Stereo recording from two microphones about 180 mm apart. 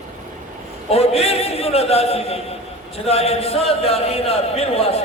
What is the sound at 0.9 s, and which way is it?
A man's voice, 35° left (ahead or behind).